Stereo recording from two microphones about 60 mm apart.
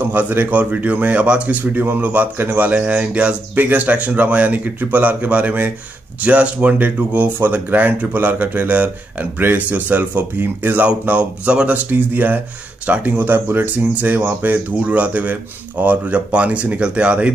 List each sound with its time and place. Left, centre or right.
0.0 s speech: right
1.6 s speech: right
10.9 s speech: right